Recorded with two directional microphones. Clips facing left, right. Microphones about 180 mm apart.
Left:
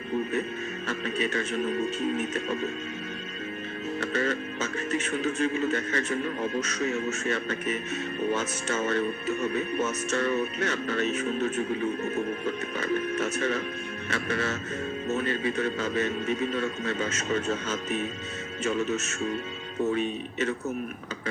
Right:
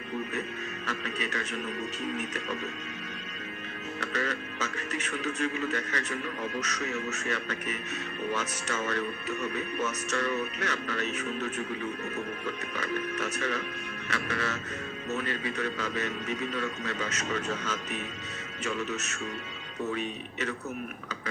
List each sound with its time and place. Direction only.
0.9 s speech: 25° left (ahead or behind)
4.0 s speech: 25° left (ahead or behind)